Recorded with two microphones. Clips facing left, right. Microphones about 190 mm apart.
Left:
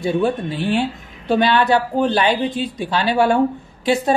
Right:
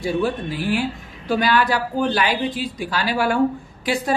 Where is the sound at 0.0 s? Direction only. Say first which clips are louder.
Left 3 dB; 25° left (ahead or behind).